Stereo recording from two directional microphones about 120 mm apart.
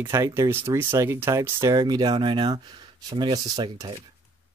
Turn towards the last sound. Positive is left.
turn(degrees=-30)  # may be behind; listen again after turning